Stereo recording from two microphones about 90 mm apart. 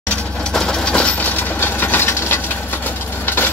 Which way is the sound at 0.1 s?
10° left (ahead or behind).